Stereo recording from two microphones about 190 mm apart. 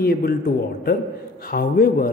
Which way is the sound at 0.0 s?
50° left (ahead or behind).